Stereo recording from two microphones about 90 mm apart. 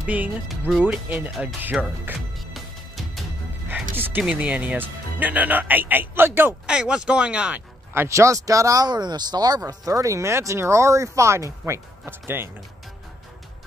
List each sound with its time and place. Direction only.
0.0 s speech: 15° right (ahead or behind)
0.5 s speech: centre (ahead or behind)
1.0 s speech: 15° right (ahead or behind)
2.3 s music: centre (ahead or behind)
3.9 s speech: 20° right (ahead or behind)
6.6 s speech: 10° right (ahead or behind)
7.9 s speech: 30° right (ahead or behind)